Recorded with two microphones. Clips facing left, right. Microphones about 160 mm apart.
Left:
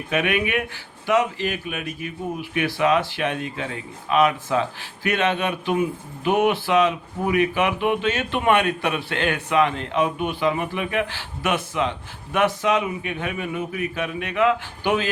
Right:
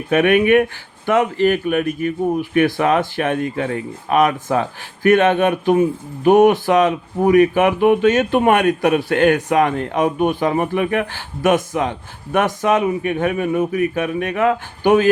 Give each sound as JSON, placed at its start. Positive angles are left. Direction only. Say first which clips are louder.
{"t": 0.1, "sound": "speech", "louder": "right 10 dB", "side_deg": -50}